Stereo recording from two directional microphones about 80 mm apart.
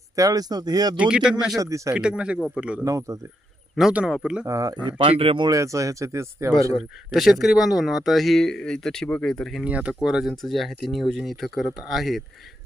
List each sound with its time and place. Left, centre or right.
0.2 s speech: right
0.9 s speech: centre
1.5 s speech: right
1.9 s speech: centre
2.8 s speech: right
3.9 s speech: centre
4.4 s speech: right
4.9 s speech: right
5.5 s speech: right
6.7 s speech: centre
9.6 s speech: centre